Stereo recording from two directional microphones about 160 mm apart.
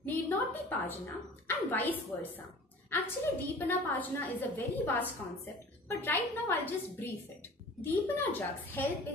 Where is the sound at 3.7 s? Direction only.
10° left (ahead or behind).